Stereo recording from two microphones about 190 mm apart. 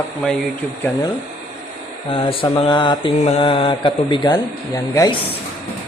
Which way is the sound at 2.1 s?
30° left (ahead or behind).